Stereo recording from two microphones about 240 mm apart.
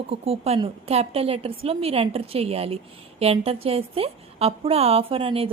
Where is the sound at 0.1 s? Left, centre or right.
Right.